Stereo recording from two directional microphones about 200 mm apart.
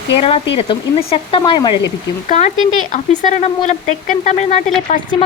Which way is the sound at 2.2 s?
35° left (ahead or behind).